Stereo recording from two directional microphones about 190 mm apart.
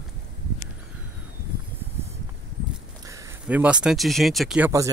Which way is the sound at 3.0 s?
15° right (ahead or behind).